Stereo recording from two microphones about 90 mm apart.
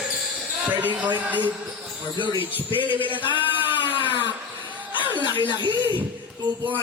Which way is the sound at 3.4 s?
20° right (ahead or behind).